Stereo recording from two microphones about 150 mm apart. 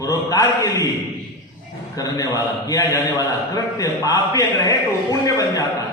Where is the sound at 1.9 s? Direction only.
25° left (ahead or behind).